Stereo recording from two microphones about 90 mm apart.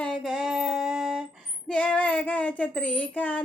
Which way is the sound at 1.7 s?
15° left (ahead or behind).